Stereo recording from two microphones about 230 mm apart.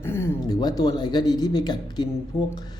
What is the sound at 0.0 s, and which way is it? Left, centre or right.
Speech, centre.